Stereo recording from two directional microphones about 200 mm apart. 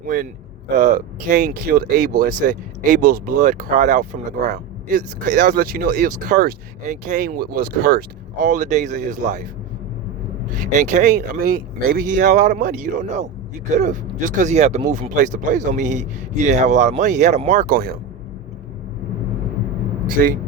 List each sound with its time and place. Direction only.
0.8 s speech: 45° right (ahead or behind)
10.5 s speech: 40° right (ahead or behind)
20.1 s speech: 45° right (ahead or behind)